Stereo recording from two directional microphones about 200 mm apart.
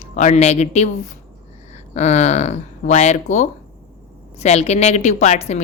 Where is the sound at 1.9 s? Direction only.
35° left (ahead or behind).